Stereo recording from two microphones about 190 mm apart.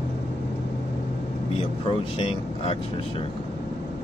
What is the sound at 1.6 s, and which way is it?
Speech, 30° left (ahead or behind).